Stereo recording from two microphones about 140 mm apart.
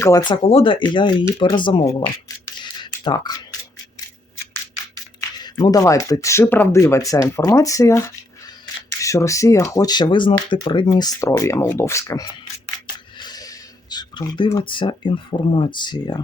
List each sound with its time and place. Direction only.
0.0 s speech: 30° left (ahead or behind)
0.4 s speech: 40° left (ahead or behind)
2.6 s a sound: 35° left (ahead or behind)
5.4 s speech: 30° left (ahead or behind); by 6.8 s 15° left (ahead or behind)
6.8 s speech: 25° left (ahead or behind)
13.1 s a sound: 30° left (ahead or behind)
14.6 s speech: 35° left (ahead or behind)